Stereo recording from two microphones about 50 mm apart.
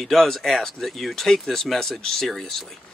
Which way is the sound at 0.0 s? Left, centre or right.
Centre.